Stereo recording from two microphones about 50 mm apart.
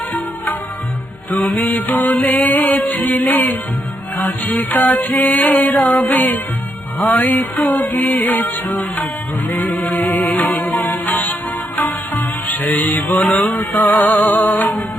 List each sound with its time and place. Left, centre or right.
1.3 s music: left
4.7 s music: left
10.2 s music: left
13.2 s music: left
13.7 s music: left